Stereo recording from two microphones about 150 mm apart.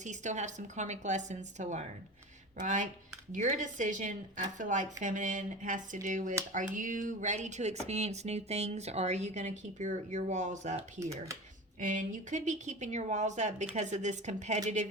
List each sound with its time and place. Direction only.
0.0 s a woman's voice: 55° right (ahead or behind)